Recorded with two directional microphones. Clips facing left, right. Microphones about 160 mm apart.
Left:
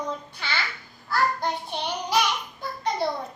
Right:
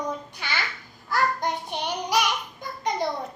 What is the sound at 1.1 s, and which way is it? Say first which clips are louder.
Child singing: even; 15° right (ahead or behind).